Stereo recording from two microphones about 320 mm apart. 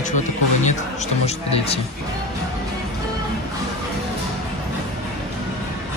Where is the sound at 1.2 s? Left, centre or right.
Centre.